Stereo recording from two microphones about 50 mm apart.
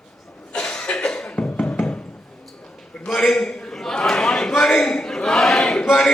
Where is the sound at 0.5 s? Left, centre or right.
Centre.